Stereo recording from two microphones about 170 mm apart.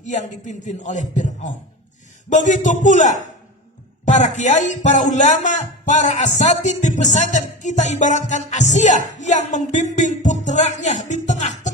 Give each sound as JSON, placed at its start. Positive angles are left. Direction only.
{"t": 0.0, "sound": "speech", "side_deg": 45}